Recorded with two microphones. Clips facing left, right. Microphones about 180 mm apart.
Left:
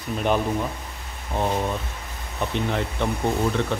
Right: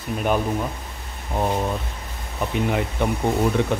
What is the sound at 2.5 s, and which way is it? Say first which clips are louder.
Speech: right 3 dB; 10° right (ahead or behind).